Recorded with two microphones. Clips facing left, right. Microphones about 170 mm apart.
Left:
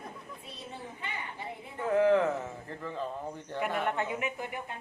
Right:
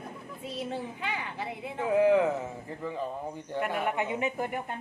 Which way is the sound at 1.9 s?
10° right (ahead or behind).